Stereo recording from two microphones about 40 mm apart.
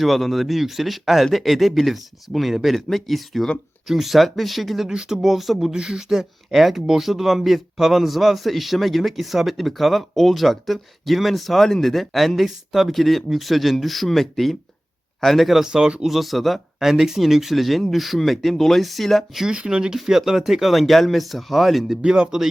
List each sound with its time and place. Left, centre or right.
0.0 s speech: centre
5.7 s speech: centre
15.6 s speech: centre
16.0 s speech: centre
19.5 s speech: right
20.1 s speech: centre
22.0 s speech: centre